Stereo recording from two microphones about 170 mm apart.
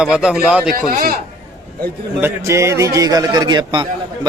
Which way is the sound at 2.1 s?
15° right (ahead or behind).